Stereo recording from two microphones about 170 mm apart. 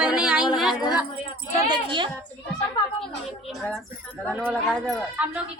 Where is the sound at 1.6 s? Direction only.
25° right (ahead or behind).